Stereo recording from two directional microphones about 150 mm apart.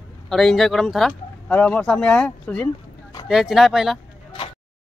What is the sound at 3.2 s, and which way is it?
Speech, 5° right (ahead or behind).